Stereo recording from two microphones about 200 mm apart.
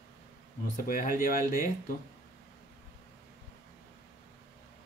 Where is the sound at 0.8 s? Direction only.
45° left (ahead or behind).